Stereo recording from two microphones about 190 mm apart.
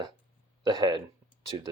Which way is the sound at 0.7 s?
25° right (ahead or behind).